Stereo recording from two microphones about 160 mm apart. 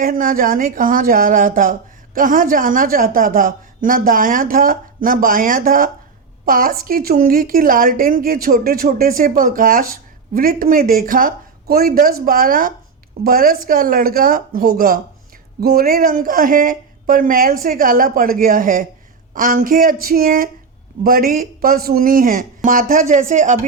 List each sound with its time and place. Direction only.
0.0 s a woman's voice: 60° right (ahead or behind)